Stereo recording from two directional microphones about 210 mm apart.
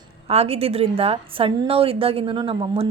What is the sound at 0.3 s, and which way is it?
A woman's voice, 30° right (ahead or behind).